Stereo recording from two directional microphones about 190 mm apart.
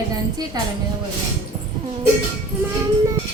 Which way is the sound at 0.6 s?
20° right (ahead or behind).